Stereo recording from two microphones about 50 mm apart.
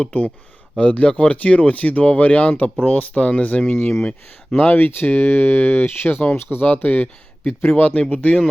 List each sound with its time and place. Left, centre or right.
0.0 s speech: left
6.7 s speech: left